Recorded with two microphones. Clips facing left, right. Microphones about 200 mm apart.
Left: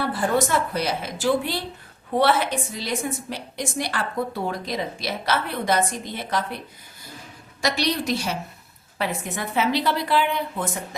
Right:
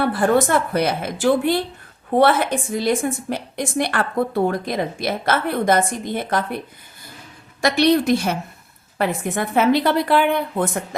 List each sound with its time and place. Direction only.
0.0 s a woman's voice: 60° right (ahead or behind)
7.6 s a woman's voice: 55° right (ahead or behind)